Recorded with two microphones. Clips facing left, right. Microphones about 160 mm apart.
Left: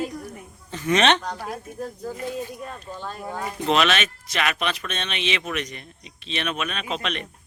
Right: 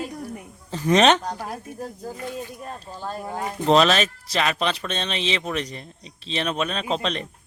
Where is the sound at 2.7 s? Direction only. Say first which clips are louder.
Right 2 dB; 35° right (ahead or behind).